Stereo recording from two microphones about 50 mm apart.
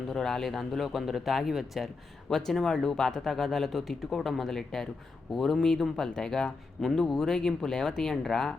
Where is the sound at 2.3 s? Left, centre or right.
Centre.